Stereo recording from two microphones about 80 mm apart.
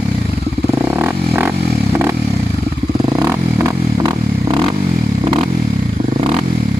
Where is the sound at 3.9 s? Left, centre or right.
Right.